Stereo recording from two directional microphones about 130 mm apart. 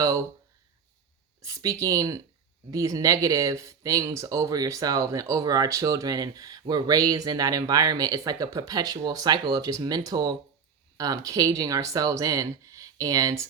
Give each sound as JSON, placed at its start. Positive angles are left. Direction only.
{"t": 1.4, "sound": "speech", "side_deg": -25}